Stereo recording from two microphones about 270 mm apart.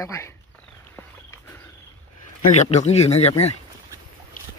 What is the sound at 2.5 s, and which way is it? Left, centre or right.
Speech, left.